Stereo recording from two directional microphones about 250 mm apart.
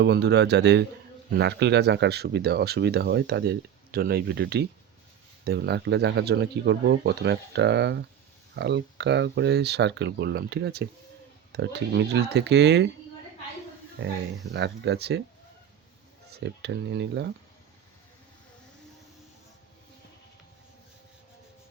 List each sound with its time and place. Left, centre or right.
0.0 s speech: right
14.0 s speech: right
16.3 s speech: right